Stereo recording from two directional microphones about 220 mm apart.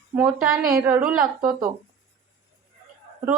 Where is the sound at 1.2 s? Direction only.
15° right (ahead or behind).